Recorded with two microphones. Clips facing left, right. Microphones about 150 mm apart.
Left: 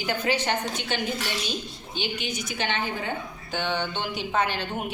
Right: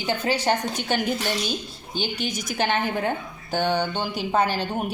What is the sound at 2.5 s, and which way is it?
A woman's voice, 45° right (ahead or behind).